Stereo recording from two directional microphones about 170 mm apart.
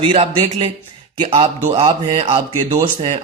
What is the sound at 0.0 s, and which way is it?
A man's voice, 35° right (ahead or behind).